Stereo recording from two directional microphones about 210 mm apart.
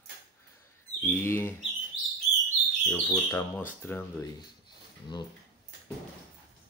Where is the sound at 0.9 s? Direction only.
10° left (ahead or behind).